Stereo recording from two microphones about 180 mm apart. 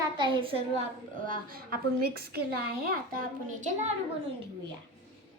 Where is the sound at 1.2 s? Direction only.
50° right (ahead or behind).